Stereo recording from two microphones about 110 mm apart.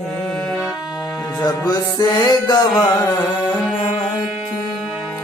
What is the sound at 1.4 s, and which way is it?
Music, 40° left (ahead or behind).